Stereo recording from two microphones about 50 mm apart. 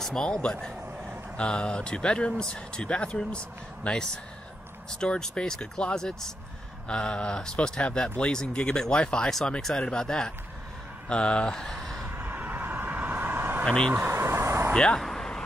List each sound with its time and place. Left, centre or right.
0.0 s speech: centre
12.1 s vehicle: right
13.4 s vehicle: right
13.7 s speech: centre
13.9 s vehicle: right
14.7 s speech: centre
15.0 s a sound: centre